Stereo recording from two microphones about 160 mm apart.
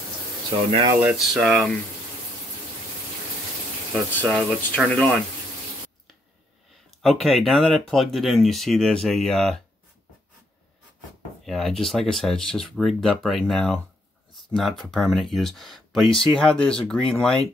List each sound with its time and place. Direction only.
0.5 s speech: 40° right (ahead or behind)
1.0 s speech: centre (ahead or behind)
4.1 s speech: 10° left (ahead or behind)
7.0 s speech: centre (ahead or behind)
11.4 s speech: centre (ahead or behind)